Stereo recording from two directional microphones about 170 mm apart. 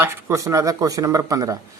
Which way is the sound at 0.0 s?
15° right (ahead or behind).